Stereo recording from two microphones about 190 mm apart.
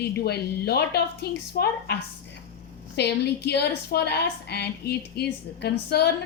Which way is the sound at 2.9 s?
60° left (ahead or behind).